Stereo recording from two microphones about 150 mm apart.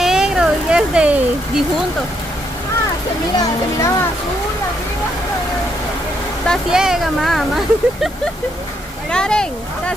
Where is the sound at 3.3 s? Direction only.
20° left (ahead or behind).